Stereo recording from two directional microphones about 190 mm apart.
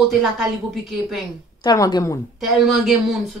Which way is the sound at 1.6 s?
20° left (ahead or behind).